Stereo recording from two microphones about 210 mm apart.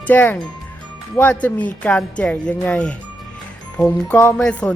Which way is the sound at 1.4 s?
5° left (ahead or behind).